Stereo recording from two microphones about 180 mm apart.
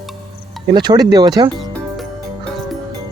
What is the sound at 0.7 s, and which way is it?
Speech, 25° right (ahead or behind).